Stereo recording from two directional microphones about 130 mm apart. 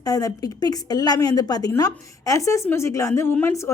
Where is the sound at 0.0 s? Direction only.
25° left (ahead or behind).